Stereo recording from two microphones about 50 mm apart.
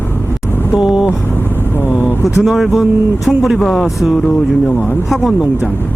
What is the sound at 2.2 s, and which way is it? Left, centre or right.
Speech, centre.